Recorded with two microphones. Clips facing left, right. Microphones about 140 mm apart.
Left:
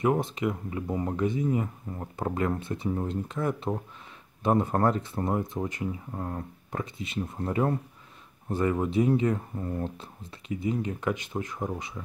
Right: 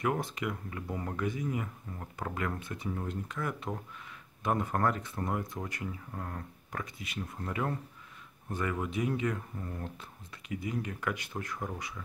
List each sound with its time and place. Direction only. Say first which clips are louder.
0.0 s speech: left 6 dB; 25° left (ahead or behind)